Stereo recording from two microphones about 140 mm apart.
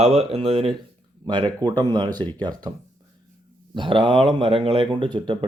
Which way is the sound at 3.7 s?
35° right (ahead or behind).